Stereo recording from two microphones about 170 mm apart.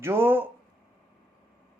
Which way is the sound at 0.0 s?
15° right (ahead or behind).